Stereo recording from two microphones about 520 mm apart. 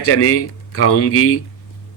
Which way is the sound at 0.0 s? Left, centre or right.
Left.